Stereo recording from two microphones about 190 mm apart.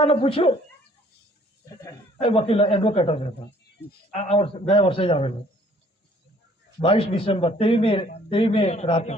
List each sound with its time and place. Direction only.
0.0 s speech: 30° left (ahead or behind)
2.1 s speech: 30° left (ahead or behind)
6.7 s a man's voice: 30° left (ahead or behind)